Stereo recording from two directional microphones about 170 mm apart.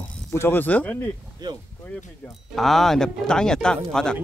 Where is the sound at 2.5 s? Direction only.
Centre (ahead or behind).